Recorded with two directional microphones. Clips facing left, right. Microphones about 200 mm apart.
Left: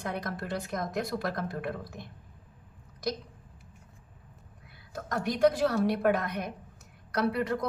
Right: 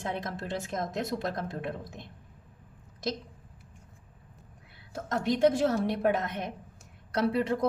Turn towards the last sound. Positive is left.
turn(degrees=-30)  # may be behind; listen again after turning